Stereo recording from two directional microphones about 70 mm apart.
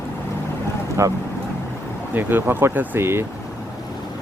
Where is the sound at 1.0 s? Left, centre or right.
Right.